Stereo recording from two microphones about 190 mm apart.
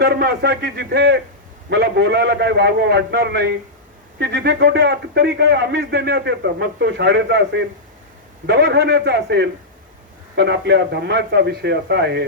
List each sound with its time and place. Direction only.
0.0 s a man's voice: 60° right (ahead or behind)